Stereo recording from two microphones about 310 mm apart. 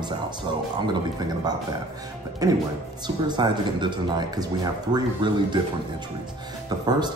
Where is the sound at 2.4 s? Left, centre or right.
Centre.